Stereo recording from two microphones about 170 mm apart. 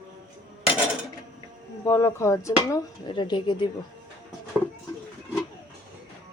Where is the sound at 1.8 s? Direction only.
15° left (ahead or behind).